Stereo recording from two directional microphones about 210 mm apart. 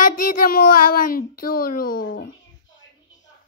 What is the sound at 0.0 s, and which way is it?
Speech, 40° left (ahead or behind).